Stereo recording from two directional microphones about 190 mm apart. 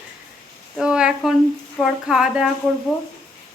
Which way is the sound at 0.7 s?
5° right (ahead or behind).